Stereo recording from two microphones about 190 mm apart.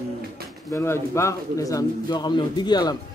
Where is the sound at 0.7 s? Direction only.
15° left (ahead or behind).